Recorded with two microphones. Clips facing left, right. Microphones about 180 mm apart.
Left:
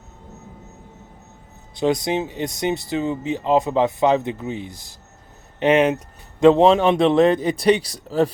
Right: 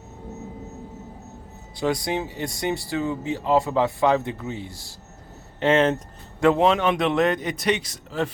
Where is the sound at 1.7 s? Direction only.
20° left (ahead or behind).